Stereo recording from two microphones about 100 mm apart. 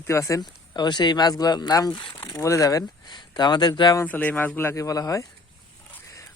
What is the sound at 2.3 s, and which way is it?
Speech, 30° left (ahead or behind).